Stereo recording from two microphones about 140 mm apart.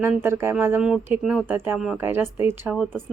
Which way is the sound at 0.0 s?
15° right (ahead or behind).